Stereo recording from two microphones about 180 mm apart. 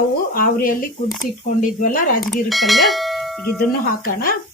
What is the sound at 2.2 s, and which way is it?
Bell, centre (ahead or behind).